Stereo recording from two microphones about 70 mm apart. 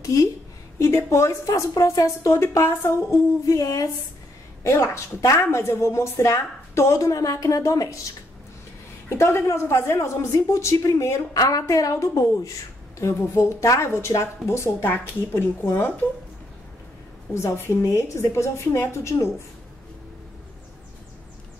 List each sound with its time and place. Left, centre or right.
0.0 s a woman's voice: left
3.5 s a woman's voice: left
9.1 s a woman's voice: left
11.3 s a woman's voice: left
17.3 s a woman's voice: left